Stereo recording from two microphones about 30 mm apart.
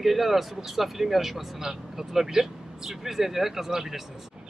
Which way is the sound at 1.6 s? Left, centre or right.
Centre.